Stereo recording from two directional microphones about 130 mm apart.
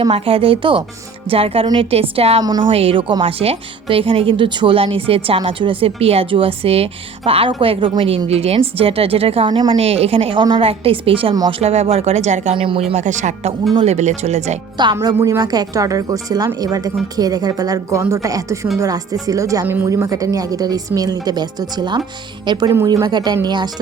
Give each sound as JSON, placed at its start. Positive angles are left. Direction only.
{"t": 0.1, "sound": "a woman's voice", "side_deg": -45}
{"t": 2.4, "sound": "a woman's voice", "side_deg": -35}
{"t": 11.6, "sound": "speech", "side_deg": -55}
{"t": 12.5, "sound": "a woman's voice", "side_deg": -45}
{"t": 12.9, "sound": "speech", "side_deg": -65}
{"t": 15.0, "sound": "speech", "side_deg": -25}